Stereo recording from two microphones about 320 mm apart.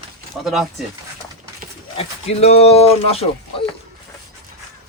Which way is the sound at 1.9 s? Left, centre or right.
Centre.